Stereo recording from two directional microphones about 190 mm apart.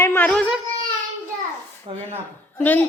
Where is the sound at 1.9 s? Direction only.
25° right (ahead or behind).